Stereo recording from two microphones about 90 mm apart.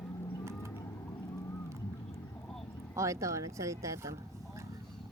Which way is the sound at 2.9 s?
35° right (ahead or behind).